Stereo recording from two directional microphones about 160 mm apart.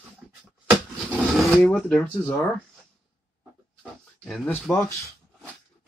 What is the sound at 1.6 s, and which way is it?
Chopping, 5° left (ahead or behind).